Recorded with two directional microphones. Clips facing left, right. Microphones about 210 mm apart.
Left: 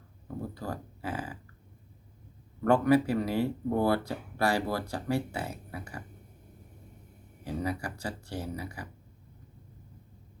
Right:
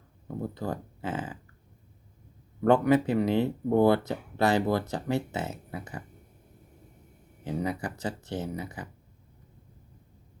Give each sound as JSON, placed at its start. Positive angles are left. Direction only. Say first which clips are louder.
{"t": 0.5, "sound": "speech", "louder": "right 4 dB", "side_deg": -20}
{"t": 2.6, "sound": "speech", "louder": "right 2 dB", "side_deg": -20}
{"t": 7.4, "sound": "speech", "louder": "right 2 dB", "side_deg": -20}